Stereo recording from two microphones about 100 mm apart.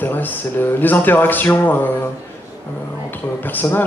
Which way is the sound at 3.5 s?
20° left (ahead or behind).